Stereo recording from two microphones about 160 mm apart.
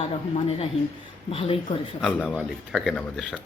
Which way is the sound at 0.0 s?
35° left (ahead or behind).